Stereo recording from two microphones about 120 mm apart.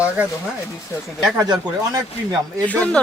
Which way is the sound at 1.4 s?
35° right (ahead or behind).